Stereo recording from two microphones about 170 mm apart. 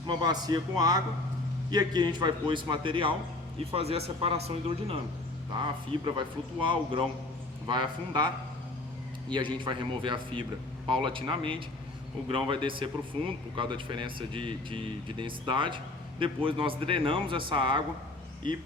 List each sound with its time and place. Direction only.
0.1 s a man's voice: 25° right (ahead or behind)
6.1 s speech: 25° right (ahead or behind)
9.6 s a man's voice: 30° right (ahead or behind)